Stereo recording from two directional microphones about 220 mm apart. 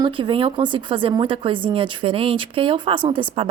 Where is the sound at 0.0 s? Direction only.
20° right (ahead or behind).